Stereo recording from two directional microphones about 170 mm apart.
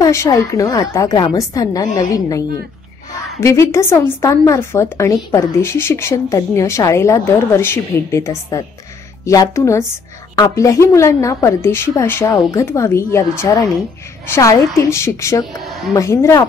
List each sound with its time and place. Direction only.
0.0 s a woman's voice: 20° left (ahead or behind)
15.6 s a sound: centre (ahead or behind)
15.9 s a woman's voice: 20° left (ahead or behind)